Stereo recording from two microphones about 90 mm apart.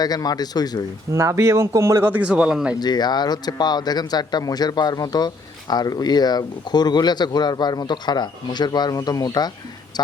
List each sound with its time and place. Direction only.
0.0 s speech: 45° left (ahead or behind)
1.1 s speech: 35° right (ahead or behind); by 2.7 s 10° right (ahead or behind)
2.8 s speech: 50° left (ahead or behind)